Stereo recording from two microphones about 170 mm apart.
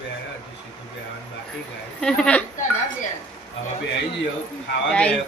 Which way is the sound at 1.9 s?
5° left (ahead or behind).